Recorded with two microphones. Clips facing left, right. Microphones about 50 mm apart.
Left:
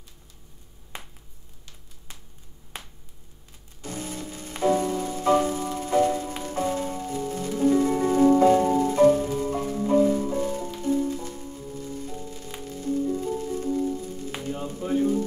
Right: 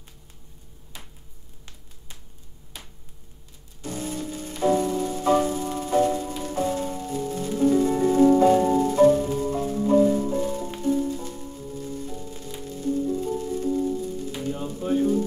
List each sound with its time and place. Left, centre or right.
0.9 s finger snapping: left
3.8 s music: left
14.5 s a sound: left